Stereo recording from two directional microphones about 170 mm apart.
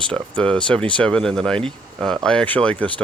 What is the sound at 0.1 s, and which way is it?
Speech, 5° left (ahead or behind).